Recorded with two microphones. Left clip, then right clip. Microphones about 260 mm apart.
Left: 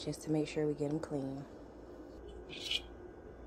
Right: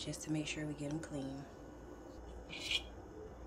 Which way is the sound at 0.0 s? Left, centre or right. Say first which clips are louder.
Left 5 dB; centre.